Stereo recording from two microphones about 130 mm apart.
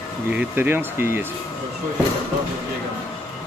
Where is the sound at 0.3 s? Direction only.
15° right (ahead or behind).